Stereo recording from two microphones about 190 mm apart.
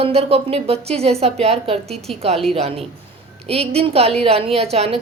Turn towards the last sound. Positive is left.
turn(degrees=-30)  # may be behind; listen again after turning